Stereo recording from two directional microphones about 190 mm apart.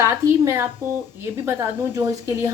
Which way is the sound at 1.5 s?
15° right (ahead or behind).